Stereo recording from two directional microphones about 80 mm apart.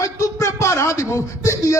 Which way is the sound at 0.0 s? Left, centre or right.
Left.